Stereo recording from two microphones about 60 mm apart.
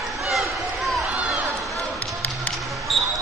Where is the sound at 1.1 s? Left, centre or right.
Right.